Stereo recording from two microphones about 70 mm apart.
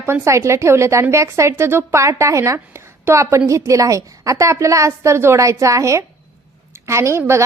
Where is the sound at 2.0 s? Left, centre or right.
Right.